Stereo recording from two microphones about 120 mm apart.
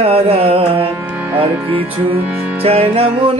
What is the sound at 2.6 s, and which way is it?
Music, 55° right (ahead or behind).